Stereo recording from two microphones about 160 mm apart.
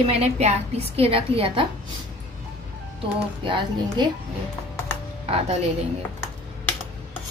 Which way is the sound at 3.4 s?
30° right (ahead or behind).